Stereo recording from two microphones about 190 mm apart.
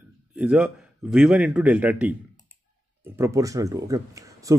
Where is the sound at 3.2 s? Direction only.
15° right (ahead or behind).